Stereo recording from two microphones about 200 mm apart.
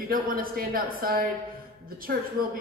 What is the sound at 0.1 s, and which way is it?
A man's voice, 45° right (ahead or behind).